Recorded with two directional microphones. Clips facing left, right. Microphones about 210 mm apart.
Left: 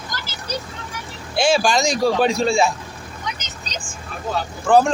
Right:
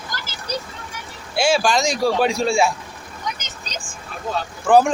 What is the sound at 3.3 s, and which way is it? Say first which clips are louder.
Vehicle: left 1 dB; 50° right (ahead or behind).